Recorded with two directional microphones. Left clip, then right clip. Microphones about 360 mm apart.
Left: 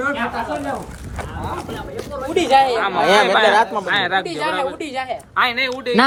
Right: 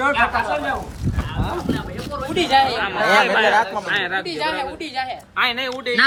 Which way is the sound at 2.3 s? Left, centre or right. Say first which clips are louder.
Left 3 dB; centre.